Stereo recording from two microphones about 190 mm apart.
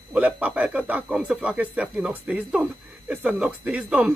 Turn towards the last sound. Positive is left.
turn(degrees=-5)  # may be behind; listen again after turning